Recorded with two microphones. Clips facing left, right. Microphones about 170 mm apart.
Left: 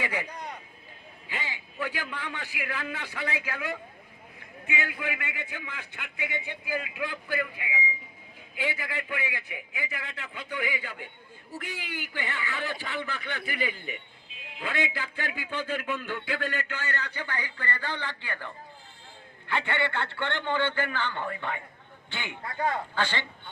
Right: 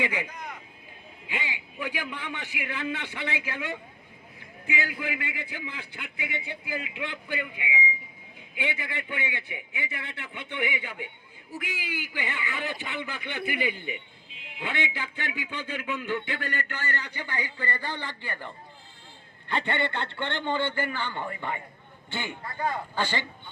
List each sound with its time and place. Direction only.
0.0 s speech: 20° right (ahead or behind)
0.3 s speech: 35° left (ahead or behind)
1.3 s a man's voice: 15° right (ahead or behind)
23.0 s a man's voice: 10° right (ahead or behind)